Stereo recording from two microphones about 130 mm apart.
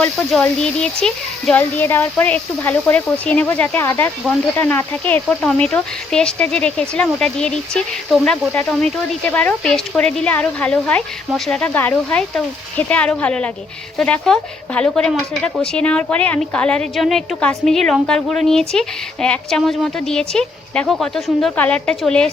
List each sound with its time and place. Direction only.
0.3 s speech: 5° left (ahead or behind)